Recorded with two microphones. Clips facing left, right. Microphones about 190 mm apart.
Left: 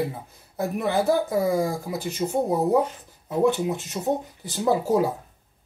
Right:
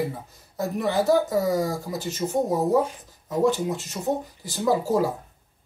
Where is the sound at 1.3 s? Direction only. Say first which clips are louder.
Even; 15° left (ahead or behind).